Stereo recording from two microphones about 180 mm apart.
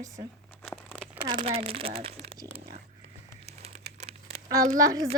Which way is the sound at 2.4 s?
35° right (ahead or behind).